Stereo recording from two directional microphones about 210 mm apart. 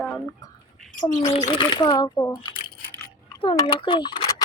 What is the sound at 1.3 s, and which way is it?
A child's voice, 25° left (ahead or behind).